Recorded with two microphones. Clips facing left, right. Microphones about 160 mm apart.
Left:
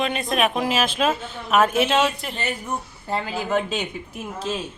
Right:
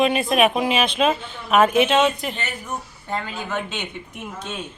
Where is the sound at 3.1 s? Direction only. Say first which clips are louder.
Left 4 dB; 35° left (ahead or behind).